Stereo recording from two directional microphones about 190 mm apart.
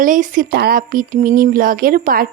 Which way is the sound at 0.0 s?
45° right (ahead or behind).